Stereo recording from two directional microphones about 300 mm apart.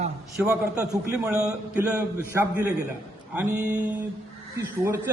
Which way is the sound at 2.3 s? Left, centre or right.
Centre.